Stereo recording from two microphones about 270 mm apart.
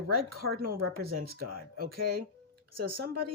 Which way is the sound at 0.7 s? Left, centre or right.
Right.